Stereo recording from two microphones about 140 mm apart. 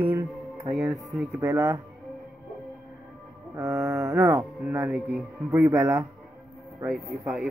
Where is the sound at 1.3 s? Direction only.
20° right (ahead or behind).